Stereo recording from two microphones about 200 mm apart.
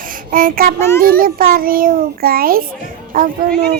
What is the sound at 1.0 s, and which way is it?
A child's voice, 45° right (ahead or behind).